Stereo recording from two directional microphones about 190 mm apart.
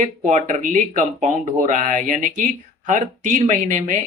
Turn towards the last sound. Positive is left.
turn(degrees=-40)  # may be behind; listen again after turning